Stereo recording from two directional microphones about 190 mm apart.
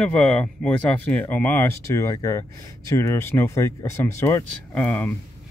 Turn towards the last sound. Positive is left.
turn(degrees=10)  # may be behind; listen again after turning